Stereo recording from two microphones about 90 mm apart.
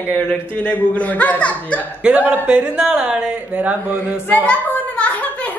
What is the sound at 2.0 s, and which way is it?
A man's voice, 15° right (ahead or behind).